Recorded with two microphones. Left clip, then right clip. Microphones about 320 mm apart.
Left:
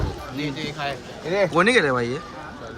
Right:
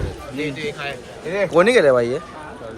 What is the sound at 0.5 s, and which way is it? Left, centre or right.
Speech, left.